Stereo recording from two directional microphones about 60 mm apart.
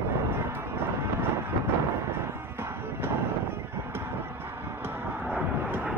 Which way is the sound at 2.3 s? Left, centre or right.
Right.